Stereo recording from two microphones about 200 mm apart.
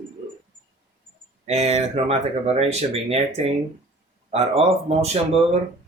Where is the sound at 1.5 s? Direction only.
30° right (ahead or behind).